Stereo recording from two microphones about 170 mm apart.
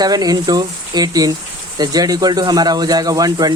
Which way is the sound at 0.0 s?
20° right (ahead or behind).